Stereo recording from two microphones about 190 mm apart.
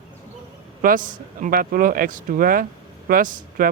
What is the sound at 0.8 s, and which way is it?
Speech, 45° right (ahead or behind).